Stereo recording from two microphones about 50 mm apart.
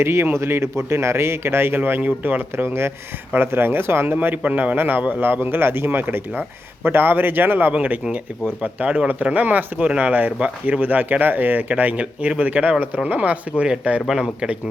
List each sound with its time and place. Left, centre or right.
0.0 s speech: right
2.0 s speech: right
4.4 s speech: right
7.7 s speech: right
11.7 s speech: right